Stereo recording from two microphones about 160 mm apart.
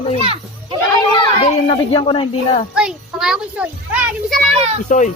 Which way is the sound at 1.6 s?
35° left (ahead or behind).